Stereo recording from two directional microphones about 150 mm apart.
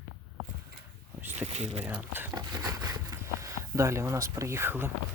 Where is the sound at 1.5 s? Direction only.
45° right (ahead or behind).